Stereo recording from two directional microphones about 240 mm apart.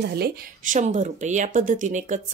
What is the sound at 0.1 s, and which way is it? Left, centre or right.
Speech, right.